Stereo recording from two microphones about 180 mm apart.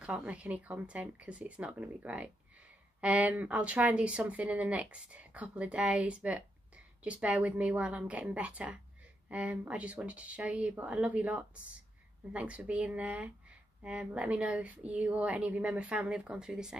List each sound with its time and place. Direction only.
0.0 s speech: 5° right (ahead or behind)